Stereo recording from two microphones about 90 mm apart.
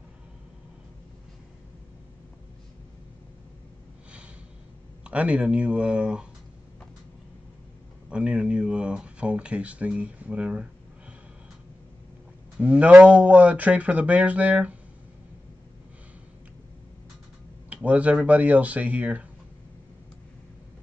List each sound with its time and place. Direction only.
5.0 s speech: 15° right (ahead or behind)
8.1 s speech: 10° right (ahead or behind)
12.5 s speech: 15° right (ahead or behind)
17.6 s a sound: 15° right (ahead or behind)
18.2 s speech: 15° right (ahead or behind)